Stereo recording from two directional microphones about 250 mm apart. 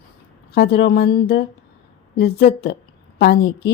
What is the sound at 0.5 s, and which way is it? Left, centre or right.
A woman's voice, left.